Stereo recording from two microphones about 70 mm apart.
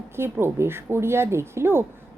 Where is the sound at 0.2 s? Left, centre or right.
Right.